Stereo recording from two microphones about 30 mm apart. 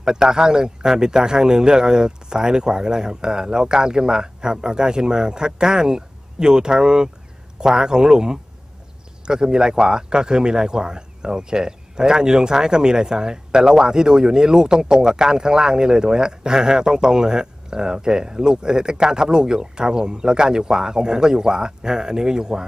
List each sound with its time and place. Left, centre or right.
0.0 s speech: right